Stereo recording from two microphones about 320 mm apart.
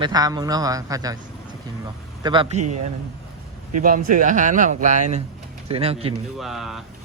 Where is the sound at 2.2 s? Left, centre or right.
Centre.